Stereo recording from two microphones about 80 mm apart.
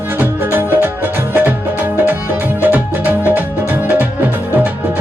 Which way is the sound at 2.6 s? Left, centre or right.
Right.